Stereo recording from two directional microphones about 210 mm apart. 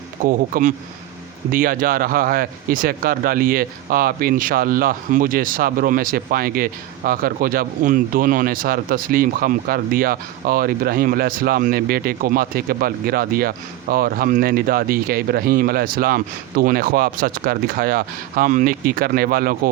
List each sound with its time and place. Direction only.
0.3 s a man's voice: 40° right (ahead or behind)